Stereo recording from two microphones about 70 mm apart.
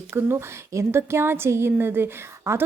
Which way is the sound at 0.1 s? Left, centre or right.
Right.